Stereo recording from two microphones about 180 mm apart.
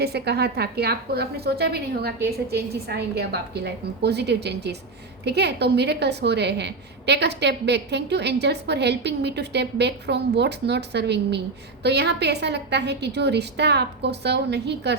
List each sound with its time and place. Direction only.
0.0 s a woman's voice: 65° right (ahead or behind)